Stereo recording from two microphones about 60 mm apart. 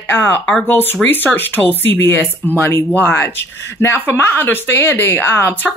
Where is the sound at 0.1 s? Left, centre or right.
Left.